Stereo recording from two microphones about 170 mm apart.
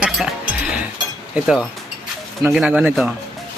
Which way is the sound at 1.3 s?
5° right (ahead or behind).